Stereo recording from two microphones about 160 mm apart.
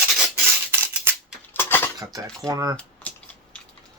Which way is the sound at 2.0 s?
20° right (ahead or behind).